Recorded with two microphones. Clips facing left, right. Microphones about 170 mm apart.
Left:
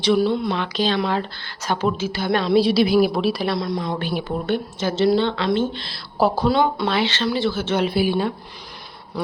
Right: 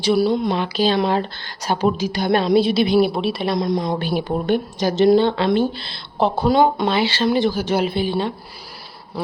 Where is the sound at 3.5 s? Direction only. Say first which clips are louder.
Right 4 dB; 20° right (ahead or behind).